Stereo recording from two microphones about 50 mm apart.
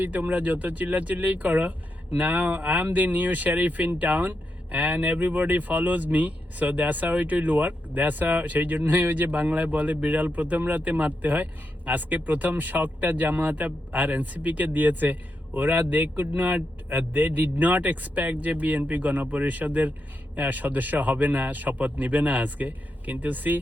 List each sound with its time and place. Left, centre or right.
0.0 s speech: right